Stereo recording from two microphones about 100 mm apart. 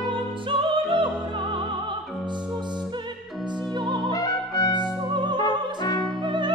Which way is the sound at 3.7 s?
50° right (ahead or behind).